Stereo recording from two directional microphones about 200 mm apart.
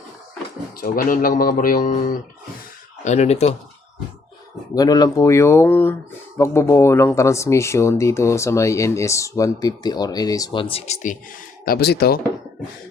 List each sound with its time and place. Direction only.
0.8 s speech: 45° left (ahead or behind)
4.7 s speech: 20° left (ahead or behind); by 11.2 s 35° left (ahead or behind)
11.6 s speech: 50° left (ahead or behind)